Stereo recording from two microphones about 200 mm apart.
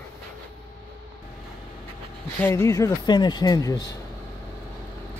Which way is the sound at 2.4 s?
15° left (ahead or behind).